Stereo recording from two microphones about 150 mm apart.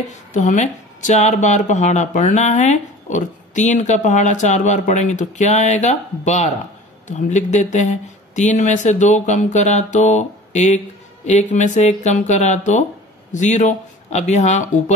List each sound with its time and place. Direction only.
0.1 s speech: 55° left (ahead or behind)